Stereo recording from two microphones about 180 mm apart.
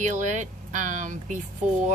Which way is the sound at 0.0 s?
45° right (ahead or behind).